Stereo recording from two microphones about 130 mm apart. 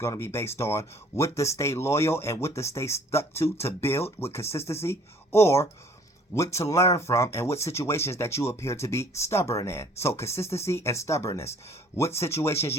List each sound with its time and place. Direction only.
0.0 s speech: 20° left (ahead or behind)